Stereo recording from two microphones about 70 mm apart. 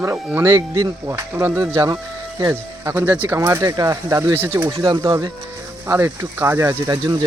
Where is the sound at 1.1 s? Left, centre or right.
Right.